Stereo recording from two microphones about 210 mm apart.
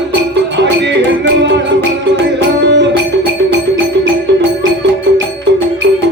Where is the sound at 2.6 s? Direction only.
55° right (ahead or behind).